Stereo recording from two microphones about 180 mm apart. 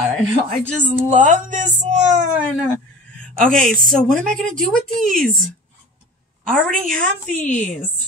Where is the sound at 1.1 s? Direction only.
45° right (ahead or behind).